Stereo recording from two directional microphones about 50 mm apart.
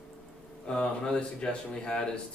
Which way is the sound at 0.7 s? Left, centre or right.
Left.